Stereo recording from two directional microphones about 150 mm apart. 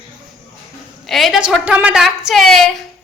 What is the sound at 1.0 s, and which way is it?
A woman's voice, centre (ahead or behind).